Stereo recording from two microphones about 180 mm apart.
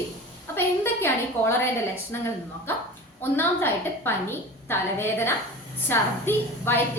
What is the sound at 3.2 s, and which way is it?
A woman's voice, 10° left (ahead or behind).